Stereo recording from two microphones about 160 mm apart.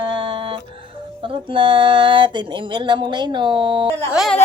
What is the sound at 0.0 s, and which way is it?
Music, 30° right (ahead or behind).